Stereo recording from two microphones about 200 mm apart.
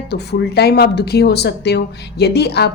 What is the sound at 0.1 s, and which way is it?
Speech, 55° left (ahead or behind).